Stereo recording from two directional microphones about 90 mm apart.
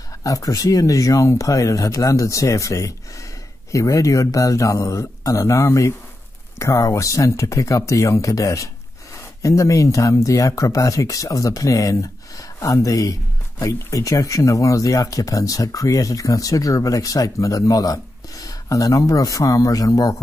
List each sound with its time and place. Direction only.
0.2 s speech: 40° left (ahead or behind)